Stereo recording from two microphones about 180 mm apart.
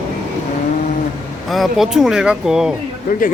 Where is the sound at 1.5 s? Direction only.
Centre (ahead or behind).